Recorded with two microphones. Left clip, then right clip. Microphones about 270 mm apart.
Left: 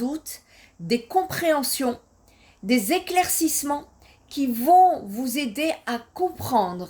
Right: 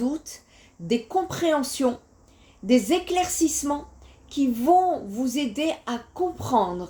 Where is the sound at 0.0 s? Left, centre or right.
Left.